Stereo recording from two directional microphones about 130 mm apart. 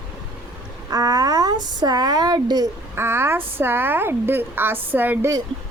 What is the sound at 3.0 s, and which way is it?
A woman's voice, 20° right (ahead or behind).